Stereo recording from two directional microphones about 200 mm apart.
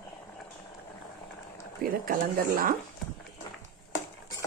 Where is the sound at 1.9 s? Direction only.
45° right (ahead or behind).